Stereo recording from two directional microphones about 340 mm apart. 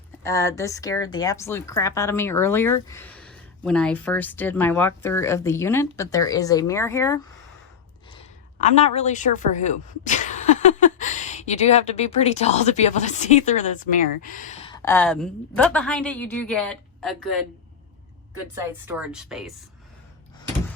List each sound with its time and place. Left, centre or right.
0.2 s speech: centre
8.8 s speech: centre
18.5 s speech: centre